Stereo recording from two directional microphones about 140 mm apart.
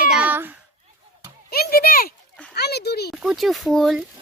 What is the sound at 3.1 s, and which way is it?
Speech, 5° right (ahead or behind).